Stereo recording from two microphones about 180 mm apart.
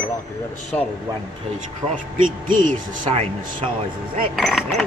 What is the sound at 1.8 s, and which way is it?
Speech, 10° right (ahead or behind).